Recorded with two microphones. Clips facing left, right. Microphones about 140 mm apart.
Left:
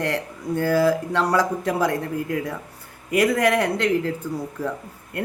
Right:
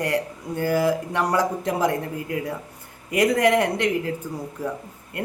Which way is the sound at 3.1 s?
20° right (ahead or behind).